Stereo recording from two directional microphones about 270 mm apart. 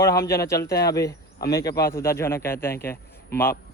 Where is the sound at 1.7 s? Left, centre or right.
Left.